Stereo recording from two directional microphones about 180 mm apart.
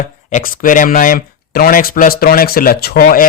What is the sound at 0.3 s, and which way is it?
Speech, 45° left (ahead or behind).